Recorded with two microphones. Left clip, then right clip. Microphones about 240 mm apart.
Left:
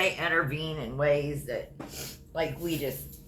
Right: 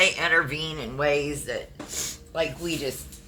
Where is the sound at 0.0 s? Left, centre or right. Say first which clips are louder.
Right 6 dB; right.